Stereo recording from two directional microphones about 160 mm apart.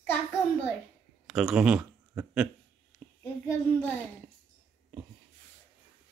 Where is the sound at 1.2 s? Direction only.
5° right (ahead or behind).